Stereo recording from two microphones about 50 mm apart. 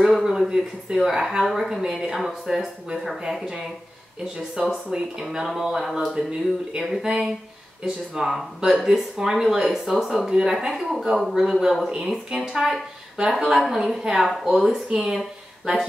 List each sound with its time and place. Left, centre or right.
0.1 s speech: centre